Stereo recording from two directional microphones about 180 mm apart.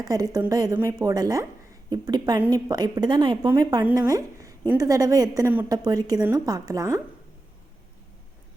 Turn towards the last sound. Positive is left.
turn(degrees=-20)  # may be behind; listen again after turning